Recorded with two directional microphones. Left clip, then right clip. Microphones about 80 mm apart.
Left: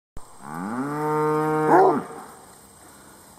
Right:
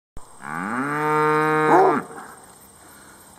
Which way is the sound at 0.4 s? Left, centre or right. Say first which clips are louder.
Right 4 dB; centre.